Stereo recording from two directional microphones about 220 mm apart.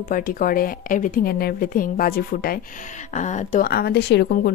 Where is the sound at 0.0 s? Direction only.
40° left (ahead or behind).